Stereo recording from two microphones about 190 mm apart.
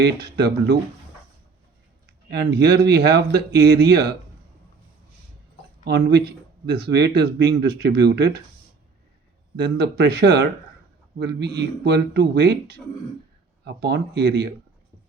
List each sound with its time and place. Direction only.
0.0 s speech: 60° right (ahead or behind)
2.3 s speech: 60° right (ahead or behind)
5.8 s speech: 60° right (ahead or behind)
9.6 s speech: 60° right (ahead or behind)